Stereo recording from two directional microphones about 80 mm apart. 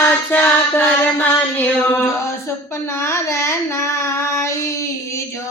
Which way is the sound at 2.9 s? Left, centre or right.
Left.